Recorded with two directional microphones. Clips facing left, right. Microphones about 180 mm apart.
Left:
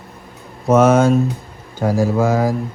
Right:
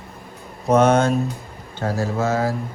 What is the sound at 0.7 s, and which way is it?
Speech, 5° left (ahead or behind).